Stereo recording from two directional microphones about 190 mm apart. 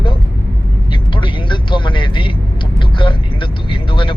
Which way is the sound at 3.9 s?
25° left (ahead or behind).